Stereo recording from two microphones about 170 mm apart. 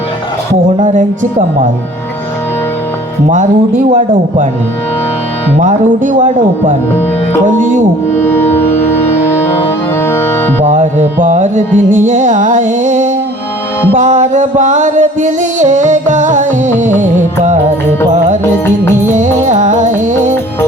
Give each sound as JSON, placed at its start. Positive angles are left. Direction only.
{"t": 0.8, "sound": "music", "side_deg": -50}
{"t": 3.2, "sound": "music", "side_deg": -50}
{"t": 5.5, "sound": "music", "side_deg": -50}
{"t": 8.1, "sound": "music", "side_deg": 15}
{"t": 10.7, "sound": "music", "side_deg": -45}
{"t": 19.1, "sound": "music", "side_deg": -45}